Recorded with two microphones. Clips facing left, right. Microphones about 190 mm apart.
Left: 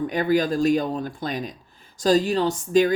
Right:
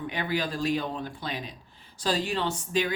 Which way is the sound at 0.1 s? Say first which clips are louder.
Left 8 dB; 45° left (ahead or behind).